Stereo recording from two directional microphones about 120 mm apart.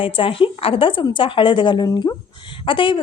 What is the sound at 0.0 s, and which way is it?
A woman's voice, 50° left (ahead or behind).